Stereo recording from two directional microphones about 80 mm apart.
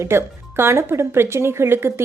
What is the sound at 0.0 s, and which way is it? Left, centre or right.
A woman's voice, right.